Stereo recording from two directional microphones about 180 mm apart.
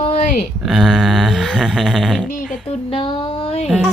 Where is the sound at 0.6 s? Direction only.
Centre (ahead or behind).